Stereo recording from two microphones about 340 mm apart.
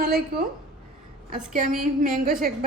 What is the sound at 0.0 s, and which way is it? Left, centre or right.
Speech, right.